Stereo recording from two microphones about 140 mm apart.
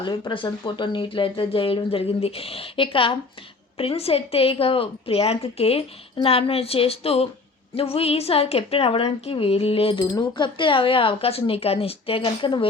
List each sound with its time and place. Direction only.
0.0 s a woman's voice: 35° left (ahead or behind)
10.0 s speech: 30° left (ahead or behind)